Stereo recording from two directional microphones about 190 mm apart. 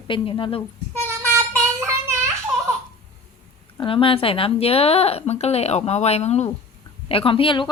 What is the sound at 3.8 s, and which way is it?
A woman's voice, 30° left (ahead or behind).